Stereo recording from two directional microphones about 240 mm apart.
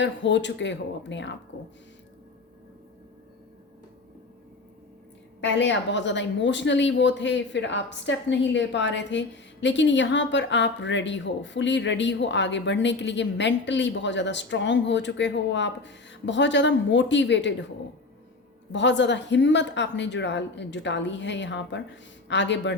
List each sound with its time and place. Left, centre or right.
0.0 s a woman's voice: left
5.4 s a woman's voice: left
18.7 s a woman's voice: left